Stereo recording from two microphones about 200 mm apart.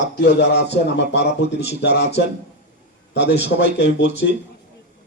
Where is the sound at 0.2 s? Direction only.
55° left (ahead or behind).